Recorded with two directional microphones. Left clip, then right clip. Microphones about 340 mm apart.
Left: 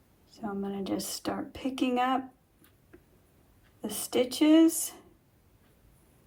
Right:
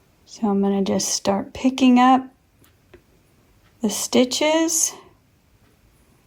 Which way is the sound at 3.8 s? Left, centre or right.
Centre.